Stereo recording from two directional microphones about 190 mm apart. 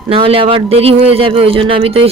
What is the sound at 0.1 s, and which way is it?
A man's voice, 30° right (ahead or behind).